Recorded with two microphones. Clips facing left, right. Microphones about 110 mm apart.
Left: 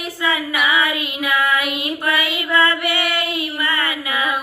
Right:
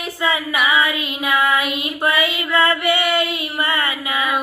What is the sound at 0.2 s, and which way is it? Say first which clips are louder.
Child singing: right 1 dB; 25° right (ahead or behind).